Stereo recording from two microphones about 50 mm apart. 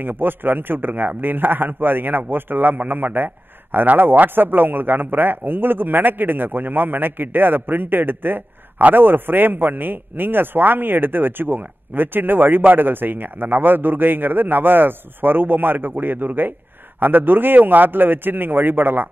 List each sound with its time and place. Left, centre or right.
0.0 s a man's voice: right